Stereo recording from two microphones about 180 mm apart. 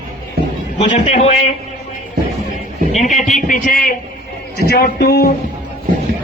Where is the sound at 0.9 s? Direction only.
35° left (ahead or behind).